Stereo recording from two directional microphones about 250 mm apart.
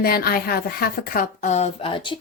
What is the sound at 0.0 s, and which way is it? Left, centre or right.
A woman's voice, left.